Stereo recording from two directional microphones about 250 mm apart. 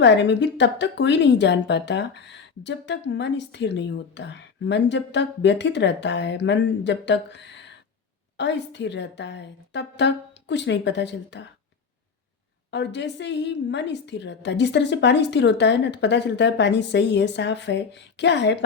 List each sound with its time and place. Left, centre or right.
0.0 s speech: left
12.7 s speech: left